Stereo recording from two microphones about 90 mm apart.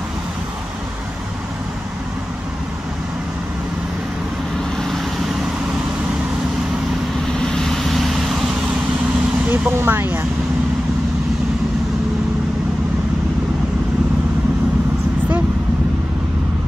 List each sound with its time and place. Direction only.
4.7 s vehicle: 5° left (ahead or behind)
7.3 s vehicle: 5° left (ahead or behind)
9.5 s speech: 25° right (ahead or behind)